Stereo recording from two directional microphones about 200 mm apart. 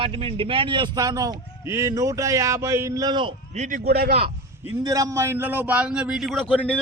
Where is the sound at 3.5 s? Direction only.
40° right (ahead or behind).